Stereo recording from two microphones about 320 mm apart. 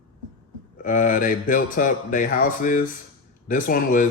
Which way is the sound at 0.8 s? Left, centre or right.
Left.